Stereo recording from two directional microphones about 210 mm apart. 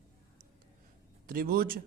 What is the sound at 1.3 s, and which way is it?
Speech, 45° right (ahead or behind).